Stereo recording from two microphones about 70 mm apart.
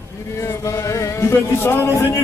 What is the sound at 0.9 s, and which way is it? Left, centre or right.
Music, left.